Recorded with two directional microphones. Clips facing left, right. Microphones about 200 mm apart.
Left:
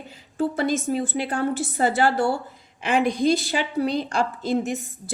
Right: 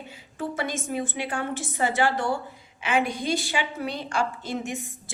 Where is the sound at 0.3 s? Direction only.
35° left (ahead or behind).